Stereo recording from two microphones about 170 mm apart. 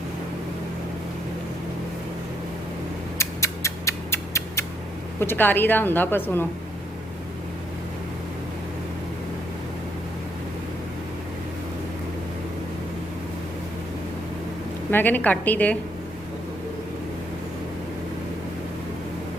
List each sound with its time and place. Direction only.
3.2 s a sound: 15° left (ahead or behind)
5.2 s a woman's voice: 10° left (ahead or behind)
14.8 s a woman's voice: 10° left (ahead or behind)